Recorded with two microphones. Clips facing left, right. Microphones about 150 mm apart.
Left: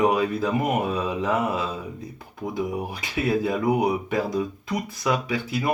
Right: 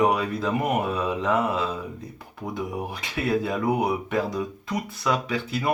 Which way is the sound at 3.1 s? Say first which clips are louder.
Left 2 dB; 5° left (ahead or behind).